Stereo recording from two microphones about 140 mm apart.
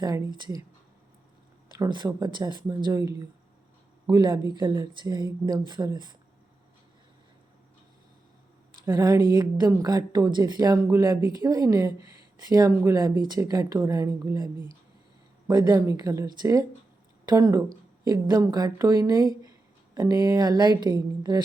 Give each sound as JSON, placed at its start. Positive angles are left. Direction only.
{"t": 0.0, "sound": "speech", "side_deg": -30}
{"t": 1.8, "sound": "speech", "side_deg": -30}
{"t": 8.8, "sound": "a woman's voice", "side_deg": -30}